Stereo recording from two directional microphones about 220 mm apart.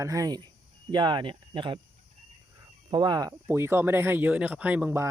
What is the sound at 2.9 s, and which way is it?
Speech, 20° right (ahead or behind).